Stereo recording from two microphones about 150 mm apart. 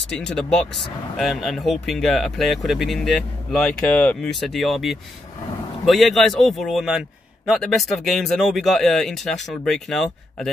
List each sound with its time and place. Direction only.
0.1 s a man's voice: 5° left (ahead or behind)
3.5 s speech: 10° left (ahead or behind)
4.4 s a man's voice: centre (ahead or behind)